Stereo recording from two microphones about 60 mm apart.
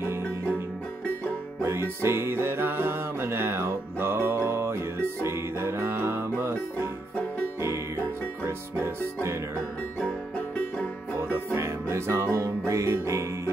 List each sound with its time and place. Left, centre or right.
1.6 s music: right
8.5 s music: right
11.3 s music: right